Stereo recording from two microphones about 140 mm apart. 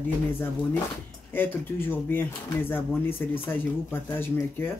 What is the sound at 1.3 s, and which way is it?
Speech, 15° left (ahead or behind).